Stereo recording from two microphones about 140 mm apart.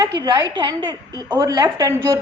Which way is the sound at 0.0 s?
25° right (ahead or behind).